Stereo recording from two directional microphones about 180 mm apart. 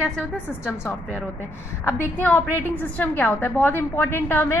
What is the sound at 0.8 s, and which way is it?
A woman's voice, 5° left (ahead or behind).